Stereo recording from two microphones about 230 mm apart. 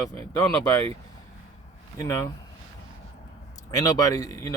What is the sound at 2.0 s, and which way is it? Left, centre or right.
Speech, centre.